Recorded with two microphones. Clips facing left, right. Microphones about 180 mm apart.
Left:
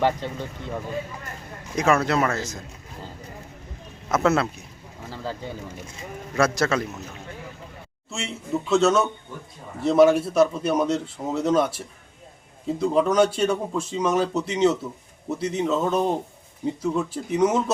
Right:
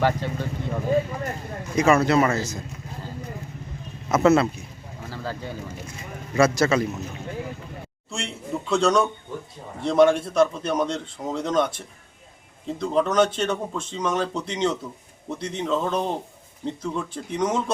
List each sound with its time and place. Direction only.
0.0 s speech: 20° left (ahead or behind)
1.7 s a man's voice: centre (ahead or behind)
4.1 s a man's voice: centre (ahead or behind)
5.0 s bird: 20° left (ahead or behind)
6.3 s a man's voice: centre (ahead or behind)
8.1 s a man's voice: centre (ahead or behind)